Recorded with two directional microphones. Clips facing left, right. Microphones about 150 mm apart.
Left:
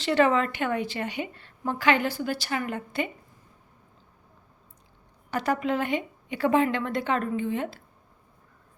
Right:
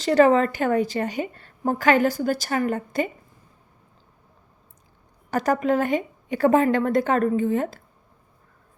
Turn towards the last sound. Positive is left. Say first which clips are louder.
# right 6 dB
turn(degrees=-45)  # may be behind; listen again after turning